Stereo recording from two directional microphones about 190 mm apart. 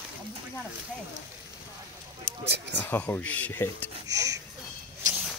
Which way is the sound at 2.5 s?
65° right (ahead or behind).